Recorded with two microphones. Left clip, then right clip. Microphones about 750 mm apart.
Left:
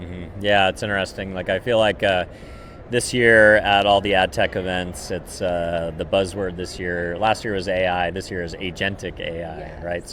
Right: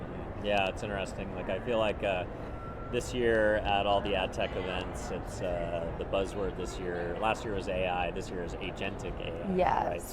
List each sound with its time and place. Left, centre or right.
0.4 s speech: left
6.1 s speech: left